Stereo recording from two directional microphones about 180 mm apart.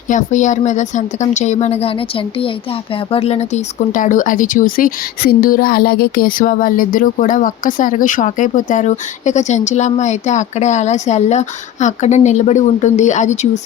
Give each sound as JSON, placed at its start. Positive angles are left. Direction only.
{"t": 0.1, "sound": "a woman's voice", "side_deg": 45}